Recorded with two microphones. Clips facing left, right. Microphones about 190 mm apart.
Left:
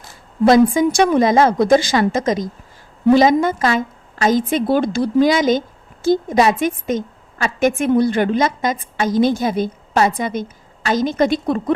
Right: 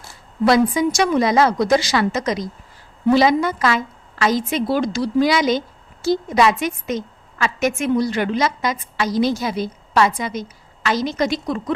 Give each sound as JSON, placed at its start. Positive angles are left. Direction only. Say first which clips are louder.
{"t": 0.4, "sound": "a woman's voice", "louder": "left 4 dB", "side_deg": 45}
{"t": 7.8, "sound": "a woman's voice", "louder": "left 4 dB", "side_deg": 55}